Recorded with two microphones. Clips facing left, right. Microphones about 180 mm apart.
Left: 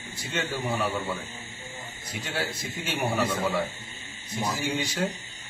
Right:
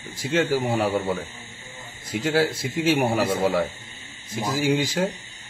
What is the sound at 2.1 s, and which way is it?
Speech, 90° right.